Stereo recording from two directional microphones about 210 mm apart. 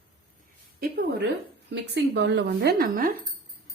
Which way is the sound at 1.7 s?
55° right (ahead or behind).